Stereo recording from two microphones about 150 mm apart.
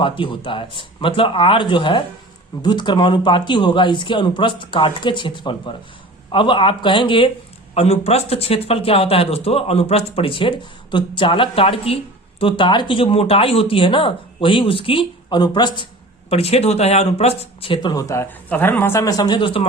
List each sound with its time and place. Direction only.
0.2 s speech: 35° left (ahead or behind)
7.7 s speech: 45° left (ahead or behind)
16.3 s speech: 45° left (ahead or behind)
17.9 s speech: 20° left (ahead or behind); by 19.6 s 35° left (ahead or behind)